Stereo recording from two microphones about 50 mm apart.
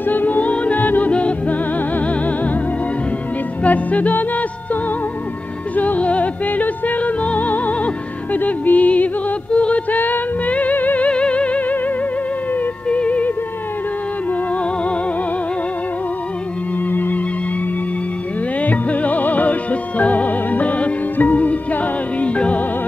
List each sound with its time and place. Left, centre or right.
0.0 s music: left
3.6 s music: left
5.8 s music: left
9.9 s music: left
11.1 s music: left
12.8 s music: left
16.9 s music: left
18.6 s music: left